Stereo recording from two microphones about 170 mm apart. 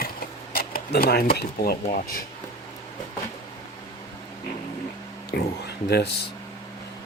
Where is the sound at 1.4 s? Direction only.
60° left (ahead or behind).